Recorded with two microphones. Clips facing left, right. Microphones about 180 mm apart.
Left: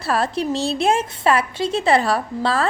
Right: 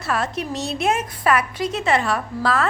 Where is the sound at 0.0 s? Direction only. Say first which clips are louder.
Left 3 dB; 35° left (ahead or behind).